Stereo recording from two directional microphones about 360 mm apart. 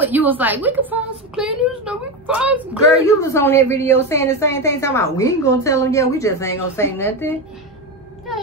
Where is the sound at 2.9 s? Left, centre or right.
Centre.